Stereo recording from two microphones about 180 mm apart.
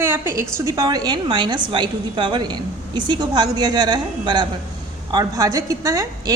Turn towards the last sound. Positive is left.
turn(degrees=-20)  # may be behind; listen again after turning